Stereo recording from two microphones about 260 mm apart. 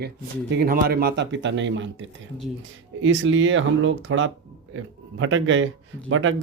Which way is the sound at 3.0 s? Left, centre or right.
Right.